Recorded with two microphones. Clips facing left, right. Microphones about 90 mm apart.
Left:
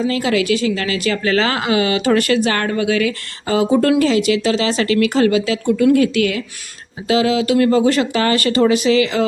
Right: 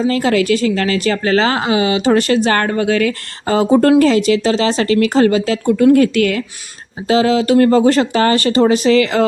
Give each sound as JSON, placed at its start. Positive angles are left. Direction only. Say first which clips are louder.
{"t": 0.0, "sound": "speech", "louder": "right 3 dB", "side_deg": -40}